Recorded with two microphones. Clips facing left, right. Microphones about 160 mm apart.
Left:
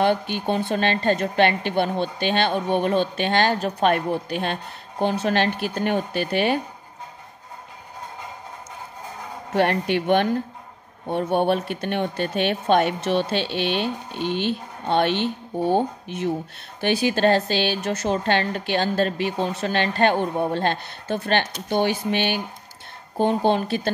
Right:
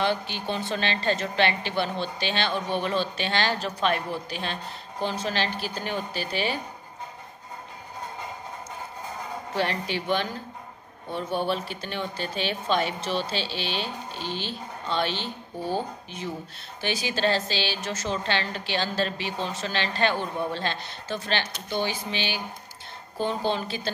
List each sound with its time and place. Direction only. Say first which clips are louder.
0.0 s speech: left 6 dB; 50° left (ahead or behind)
9.5 s speech: left 8 dB; 60° left (ahead or behind)